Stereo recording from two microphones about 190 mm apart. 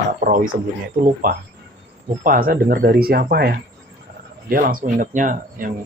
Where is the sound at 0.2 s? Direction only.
45° right (ahead or behind).